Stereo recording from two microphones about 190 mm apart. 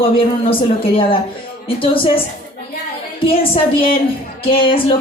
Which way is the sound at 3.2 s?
30° left (ahead or behind).